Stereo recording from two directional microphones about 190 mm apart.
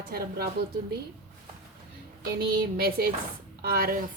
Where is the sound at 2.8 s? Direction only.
50° right (ahead or behind).